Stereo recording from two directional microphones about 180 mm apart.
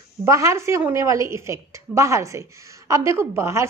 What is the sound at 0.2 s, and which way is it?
A woman's voice, 15° right (ahead or behind).